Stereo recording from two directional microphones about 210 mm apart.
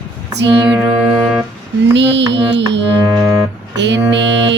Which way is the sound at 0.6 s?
5° right (ahead or behind).